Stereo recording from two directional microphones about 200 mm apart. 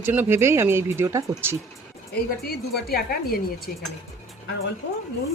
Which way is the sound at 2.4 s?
50° left (ahead or behind).